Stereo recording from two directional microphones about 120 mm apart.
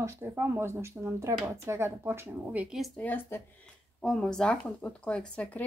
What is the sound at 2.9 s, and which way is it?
Speech, 15° left (ahead or behind).